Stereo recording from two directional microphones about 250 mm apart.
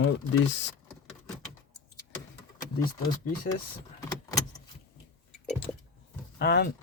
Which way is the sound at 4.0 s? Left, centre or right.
Centre.